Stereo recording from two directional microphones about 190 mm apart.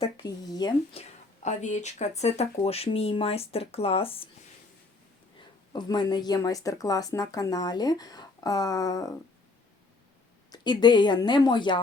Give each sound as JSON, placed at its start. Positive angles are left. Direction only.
{"t": 0.2, "sound": "speech", "side_deg": 20}
{"t": 0.9, "sound": "speech", "side_deg": 40}
{"t": 5.7, "sound": "speech", "side_deg": 25}
{"t": 10.5, "sound": "speech", "side_deg": 20}